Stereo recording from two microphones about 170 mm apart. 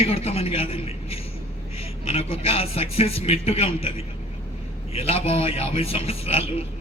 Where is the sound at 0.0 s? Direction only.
35° left (ahead or behind).